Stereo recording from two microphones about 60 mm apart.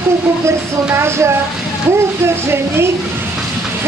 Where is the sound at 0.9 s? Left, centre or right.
Right.